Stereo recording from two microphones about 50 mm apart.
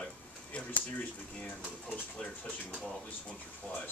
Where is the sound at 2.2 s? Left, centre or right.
Centre.